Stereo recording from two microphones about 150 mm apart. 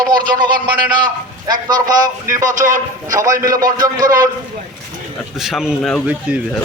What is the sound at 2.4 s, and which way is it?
Speech, 60° right (ahead or behind).